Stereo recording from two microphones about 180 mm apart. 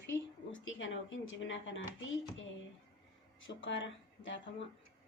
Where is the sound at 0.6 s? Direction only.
90° left.